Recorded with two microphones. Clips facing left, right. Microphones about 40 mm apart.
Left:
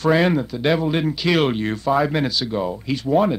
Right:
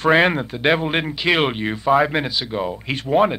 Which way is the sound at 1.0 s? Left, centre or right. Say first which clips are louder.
Even; right.